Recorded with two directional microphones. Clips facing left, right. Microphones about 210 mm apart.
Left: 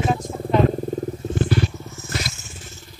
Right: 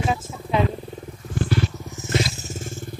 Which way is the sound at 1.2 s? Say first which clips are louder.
Even; 15° left (ahead or behind).